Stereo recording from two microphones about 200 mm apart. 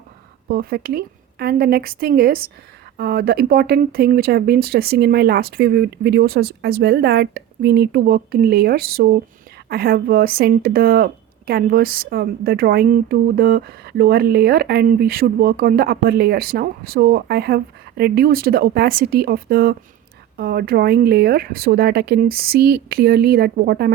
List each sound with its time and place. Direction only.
0.4 s speech: 50° right (ahead or behind)